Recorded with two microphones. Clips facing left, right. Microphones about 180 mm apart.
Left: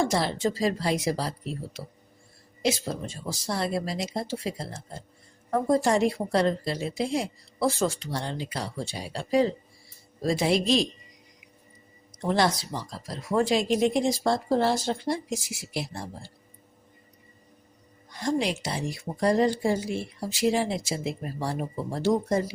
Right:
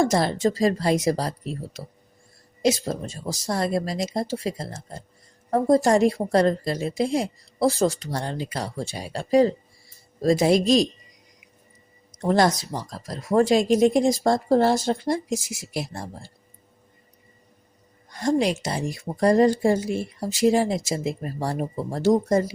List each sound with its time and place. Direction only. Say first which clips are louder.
0.0 s a woman's voice: right 4 dB; 45° right (ahead or behind)
12.2 s a woman's voice: right 4 dB; 45° right (ahead or behind)
18.1 s a woman's voice: right 5 dB; 45° right (ahead or behind)